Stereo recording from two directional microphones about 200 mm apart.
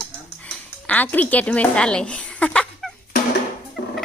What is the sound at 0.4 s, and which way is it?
Music, 5° left (ahead or behind).